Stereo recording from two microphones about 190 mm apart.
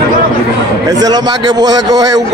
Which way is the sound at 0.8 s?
20° right (ahead or behind).